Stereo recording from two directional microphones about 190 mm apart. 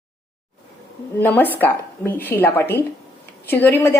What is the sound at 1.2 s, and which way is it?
A woman's voice, 10° left (ahead or behind).